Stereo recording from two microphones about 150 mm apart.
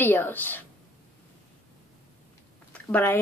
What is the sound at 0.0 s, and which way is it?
Speech, 15° left (ahead or behind).